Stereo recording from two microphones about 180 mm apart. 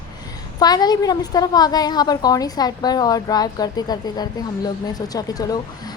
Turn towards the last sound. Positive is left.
turn(degrees=20)  # may be behind; listen again after turning